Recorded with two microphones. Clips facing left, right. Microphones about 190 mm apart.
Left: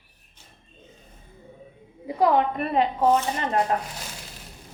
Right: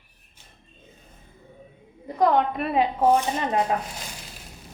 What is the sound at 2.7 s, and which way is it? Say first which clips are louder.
Speech: right 1 dB; 10° right (ahead or behind).